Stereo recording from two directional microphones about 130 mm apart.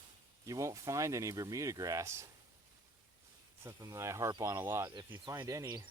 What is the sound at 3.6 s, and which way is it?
Speech, 25° right (ahead or behind).